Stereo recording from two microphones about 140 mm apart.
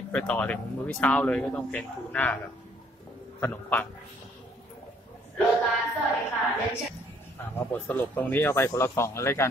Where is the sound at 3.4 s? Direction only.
10° left (ahead or behind).